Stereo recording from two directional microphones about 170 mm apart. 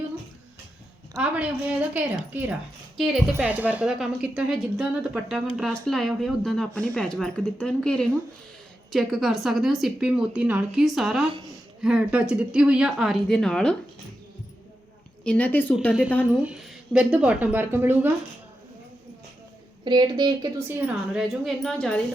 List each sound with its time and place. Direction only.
1.9 s a woman's voice: 10° right (ahead or behind)
15.2 s a woman's voice: 5° left (ahead or behind)
15.9 s a woman's voice: 5° right (ahead or behind)
19.8 s speech: 25° right (ahead or behind)
20.7 s speech: 5° right (ahead or behind)